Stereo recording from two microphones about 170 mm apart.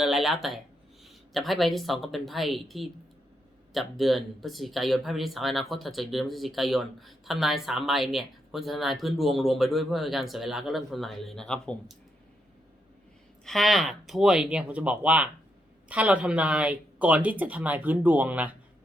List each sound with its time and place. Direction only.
0.0 s speech: centre (ahead or behind)
13.4 s speech: centre (ahead or behind)